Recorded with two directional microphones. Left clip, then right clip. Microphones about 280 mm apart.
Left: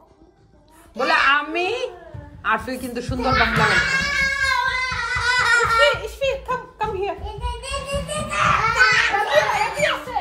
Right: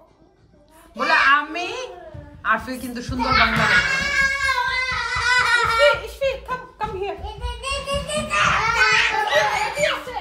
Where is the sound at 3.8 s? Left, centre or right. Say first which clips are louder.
Even; centre.